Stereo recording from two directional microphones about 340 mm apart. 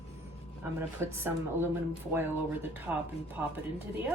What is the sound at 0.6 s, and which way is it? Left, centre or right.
Speech, centre.